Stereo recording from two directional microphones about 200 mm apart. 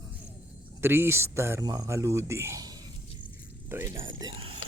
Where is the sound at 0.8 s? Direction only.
10° right (ahead or behind).